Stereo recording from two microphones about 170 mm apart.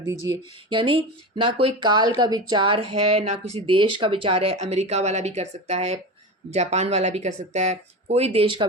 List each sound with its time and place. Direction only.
0.0 s speech: 20° right (ahead or behind)